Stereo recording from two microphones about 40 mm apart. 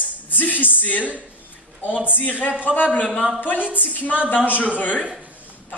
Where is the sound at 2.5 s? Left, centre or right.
Right.